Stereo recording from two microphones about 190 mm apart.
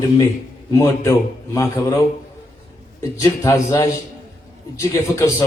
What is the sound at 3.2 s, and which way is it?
A man's voice, 15° left (ahead or behind).